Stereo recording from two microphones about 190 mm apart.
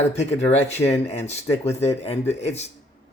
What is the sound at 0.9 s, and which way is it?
Speech, 35° left (ahead or behind).